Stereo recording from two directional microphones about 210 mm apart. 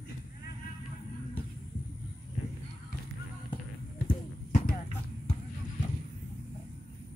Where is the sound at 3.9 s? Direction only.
40° left (ahead or behind).